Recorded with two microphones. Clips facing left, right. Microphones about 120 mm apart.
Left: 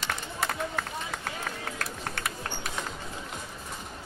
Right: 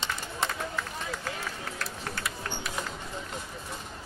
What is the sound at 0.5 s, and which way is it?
Run, 55° left (ahead or behind).